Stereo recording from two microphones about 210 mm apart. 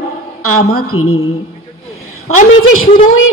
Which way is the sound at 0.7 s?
90° left.